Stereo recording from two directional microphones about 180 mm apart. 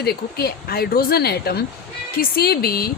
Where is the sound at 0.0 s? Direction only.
60° left (ahead or behind).